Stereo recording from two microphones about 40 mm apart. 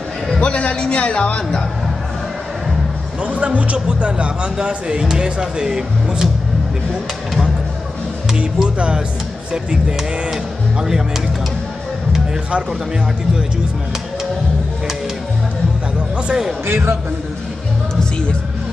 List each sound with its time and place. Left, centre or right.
0.4 s a man's voice: left
3.3 s speech: right; by 6.3 s centre
8.4 s speech: right
16.6 s speech: right